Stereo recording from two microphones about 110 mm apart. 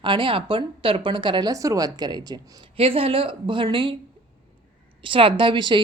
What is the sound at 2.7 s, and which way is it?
Speech, 60° right (ahead or behind).